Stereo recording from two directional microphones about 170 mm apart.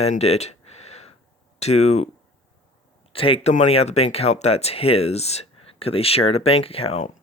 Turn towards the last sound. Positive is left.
turn(degrees=40)  # may be behind; listen again after turning